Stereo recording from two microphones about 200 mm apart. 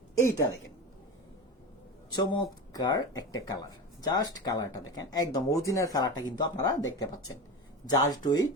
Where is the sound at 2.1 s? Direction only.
20° left (ahead or behind).